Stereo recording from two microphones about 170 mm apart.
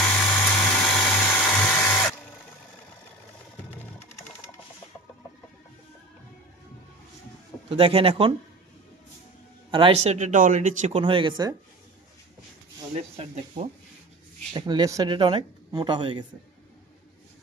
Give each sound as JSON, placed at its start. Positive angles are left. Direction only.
{"t": 0.0, "sound": "dental drill", "side_deg": 10}
{"t": 7.7, "sound": "speech", "side_deg": -35}
{"t": 9.7, "sound": "speech", "side_deg": -30}
{"t": 10.1, "sound": "speech", "side_deg": -50}
{"t": 11.0, "sound": "speech", "side_deg": -30}
{"t": 14.5, "sound": "speech", "side_deg": -25}